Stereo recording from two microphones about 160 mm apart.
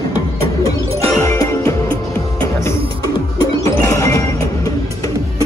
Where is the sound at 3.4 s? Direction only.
20° left (ahead or behind).